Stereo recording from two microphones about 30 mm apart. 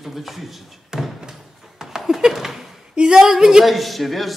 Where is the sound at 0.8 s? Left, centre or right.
Centre.